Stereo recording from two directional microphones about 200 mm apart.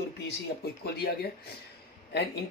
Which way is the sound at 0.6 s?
55° left (ahead or behind).